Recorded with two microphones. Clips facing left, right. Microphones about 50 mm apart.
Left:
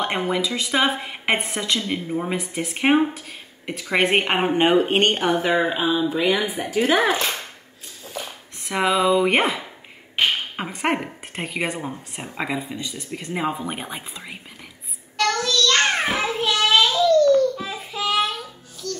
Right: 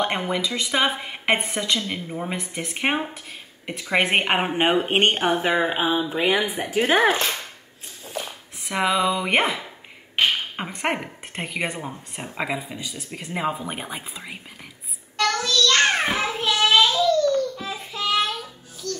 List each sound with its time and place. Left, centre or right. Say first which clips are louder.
0.0 s speech: left 1 dB; centre; by 7.2 s right
8.6 s speech: left 2 dB; centre
15.1 s child singing: left 1 dB; centre